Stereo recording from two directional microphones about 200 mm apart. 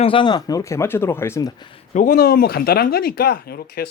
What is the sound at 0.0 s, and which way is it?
Speech, 25° left (ahead or behind).